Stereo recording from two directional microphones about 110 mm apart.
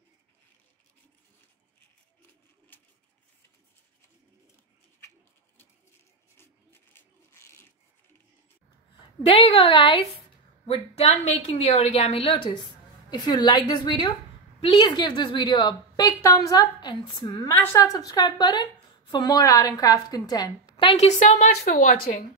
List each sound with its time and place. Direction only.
6.3 s a sound: 20° left (ahead or behind)
9.2 s a woman's voice: 65° left (ahead or behind)
10.7 s a woman's voice: 65° left (ahead or behind)
13.1 s a woman's voice: 45° left (ahead or behind)
16.1 s a woman's voice: 30° left (ahead or behind)
17.7 s a woman's voice: 30° left (ahead or behind)
21.0 s a woman's voice: 85° left